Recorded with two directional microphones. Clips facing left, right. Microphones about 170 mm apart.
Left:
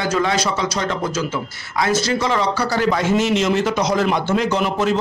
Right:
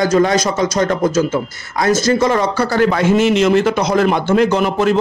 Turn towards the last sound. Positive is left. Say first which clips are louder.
# right 5 dB
turn(degrees=-55)  # may be behind; listen again after turning